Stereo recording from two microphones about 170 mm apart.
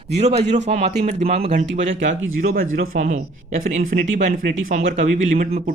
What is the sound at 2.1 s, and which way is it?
Speech, 60° right (ahead or behind).